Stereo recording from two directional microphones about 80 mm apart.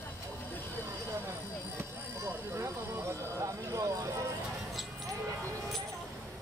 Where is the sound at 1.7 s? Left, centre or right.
Right.